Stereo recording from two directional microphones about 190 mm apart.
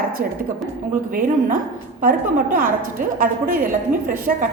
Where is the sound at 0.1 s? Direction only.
50° right (ahead or behind).